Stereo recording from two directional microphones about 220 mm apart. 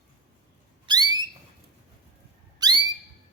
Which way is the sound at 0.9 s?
20° right (ahead or behind).